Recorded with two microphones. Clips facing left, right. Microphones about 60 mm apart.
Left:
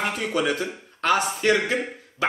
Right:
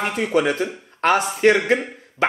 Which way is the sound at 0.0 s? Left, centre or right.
Right.